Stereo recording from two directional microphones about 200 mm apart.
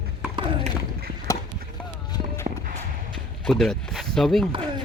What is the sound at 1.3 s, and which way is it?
Chop, 15° left (ahead or behind).